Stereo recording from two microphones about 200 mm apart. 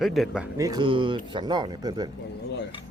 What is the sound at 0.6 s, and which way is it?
Speech, 20° right (ahead or behind).